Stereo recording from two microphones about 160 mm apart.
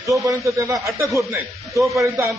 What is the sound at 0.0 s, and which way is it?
A man's voice, 20° right (ahead or behind).